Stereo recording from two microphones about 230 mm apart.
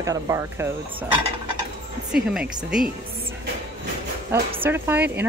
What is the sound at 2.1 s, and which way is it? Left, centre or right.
Speech, centre.